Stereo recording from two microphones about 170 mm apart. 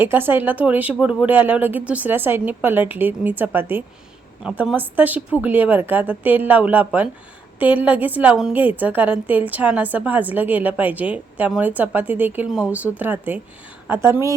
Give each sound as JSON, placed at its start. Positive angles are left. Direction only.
{"t": 0.0, "sound": "a woman's voice", "side_deg": -10}